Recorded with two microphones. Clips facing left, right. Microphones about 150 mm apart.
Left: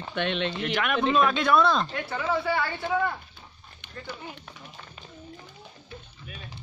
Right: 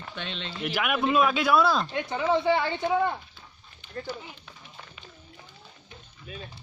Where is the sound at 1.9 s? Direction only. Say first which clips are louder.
Right 3 dB; 20° right (ahead or behind).